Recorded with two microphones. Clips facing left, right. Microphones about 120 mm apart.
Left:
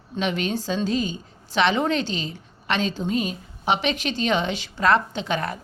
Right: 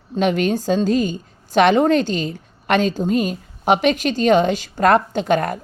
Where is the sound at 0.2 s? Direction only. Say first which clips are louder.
Right 7 dB; 45° right (ahead or behind).